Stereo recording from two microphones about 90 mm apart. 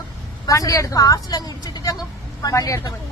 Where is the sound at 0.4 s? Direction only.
40° left (ahead or behind).